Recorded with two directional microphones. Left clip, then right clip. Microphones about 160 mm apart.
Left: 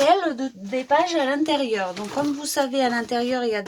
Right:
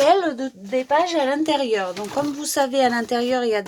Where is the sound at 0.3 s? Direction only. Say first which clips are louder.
Right 3 dB; 25° right (ahead or behind).